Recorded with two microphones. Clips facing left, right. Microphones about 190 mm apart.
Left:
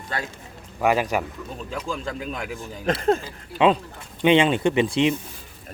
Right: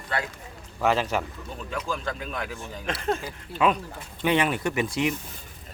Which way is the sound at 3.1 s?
30° left (ahead or behind).